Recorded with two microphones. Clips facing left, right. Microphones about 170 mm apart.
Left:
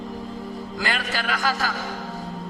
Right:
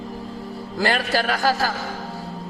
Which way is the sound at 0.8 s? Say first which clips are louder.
Right 7 dB; 40° right (ahead or behind).